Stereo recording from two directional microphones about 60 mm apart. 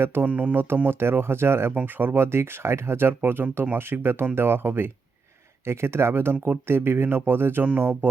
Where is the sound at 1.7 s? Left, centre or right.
Right.